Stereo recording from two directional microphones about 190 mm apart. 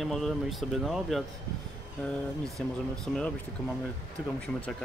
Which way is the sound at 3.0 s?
5° left (ahead or behind).